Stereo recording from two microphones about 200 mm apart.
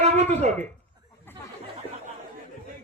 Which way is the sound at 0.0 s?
35° right (ahead or behind).